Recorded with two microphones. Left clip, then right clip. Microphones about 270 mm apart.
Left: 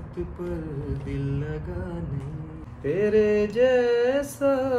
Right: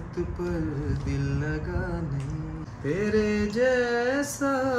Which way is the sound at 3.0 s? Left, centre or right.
Centre.